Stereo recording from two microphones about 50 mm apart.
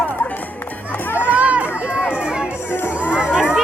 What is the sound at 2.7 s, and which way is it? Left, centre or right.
Music, left.